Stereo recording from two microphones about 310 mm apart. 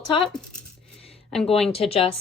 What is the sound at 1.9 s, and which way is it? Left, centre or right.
Speech, centre.